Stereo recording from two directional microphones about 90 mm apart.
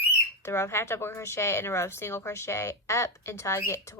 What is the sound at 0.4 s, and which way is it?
A woman's voice, 30° left (ahead or behind).